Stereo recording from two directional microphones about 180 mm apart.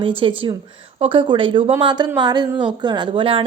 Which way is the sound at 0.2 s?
30° right (ahead or behind).